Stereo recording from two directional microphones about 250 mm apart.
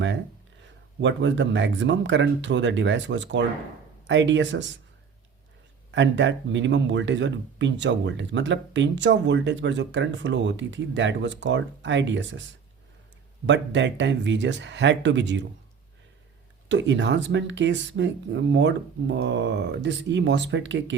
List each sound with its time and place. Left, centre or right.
1.0 s speech: right
5.9 s speech: right
13.5 s speech: right
16.6 s speech: right